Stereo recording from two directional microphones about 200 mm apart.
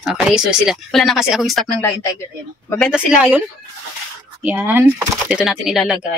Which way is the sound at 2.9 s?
5° right (ahead or behind).